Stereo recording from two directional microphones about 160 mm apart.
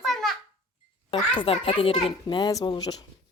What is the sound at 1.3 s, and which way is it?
A child's voice, 35° left (ahead or behind).